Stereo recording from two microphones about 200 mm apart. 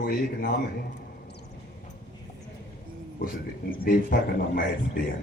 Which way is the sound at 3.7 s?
45° left (ahead or behind).